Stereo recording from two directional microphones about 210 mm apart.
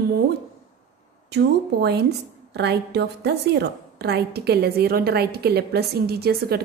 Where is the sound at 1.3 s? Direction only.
55° right (ahead or behind).